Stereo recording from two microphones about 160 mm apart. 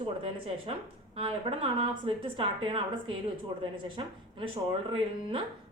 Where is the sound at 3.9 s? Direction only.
35° right (ahead or behind).